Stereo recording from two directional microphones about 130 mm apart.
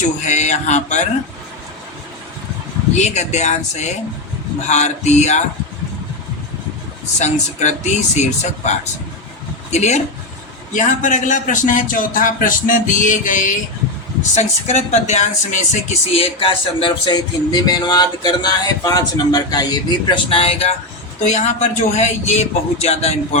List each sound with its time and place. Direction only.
0.3 s a sound: 65° left (ahead or behind)
2.9 s a man's voice: 60° left (ahead or behind)
7.2 s a man's voice: 65° left (ahead or behind)
10.7 s a man's voice: 75° left (ahead or behind)
14.3 s a man's voice: 60° left (ahead or behind)
15.7 s speech: 50° left (ahead or behind)
21.2 s a man's voice: 60° left (ahead or behind)